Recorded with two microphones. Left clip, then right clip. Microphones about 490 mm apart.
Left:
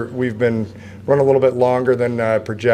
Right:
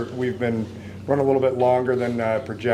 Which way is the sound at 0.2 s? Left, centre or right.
Left.